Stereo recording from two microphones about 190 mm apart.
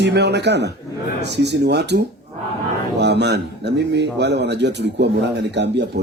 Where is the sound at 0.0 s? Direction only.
60° right (ahead or behind).